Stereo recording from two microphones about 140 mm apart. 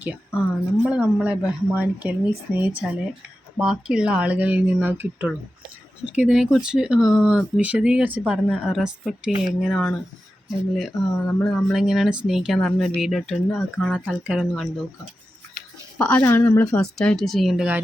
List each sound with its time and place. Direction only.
0.3 s speech: 10° right (ahead or behind)
11.3 s speech: 15° left (ahead or behind)
11.5 s speech: centre (ahead or behind)
16.0 s speech: 10° left (ahead or behind)